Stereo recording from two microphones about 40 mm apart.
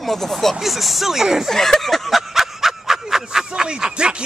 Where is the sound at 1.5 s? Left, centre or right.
Centre.